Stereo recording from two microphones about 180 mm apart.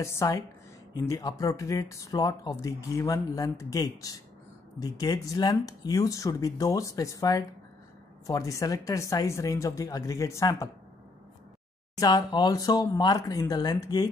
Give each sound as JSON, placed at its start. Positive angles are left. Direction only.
{"t": 0.0, "sound": "a woman's voice", "side_deg": 15}
{"t": 12.0, "sound": "speech", "side_deg": 25}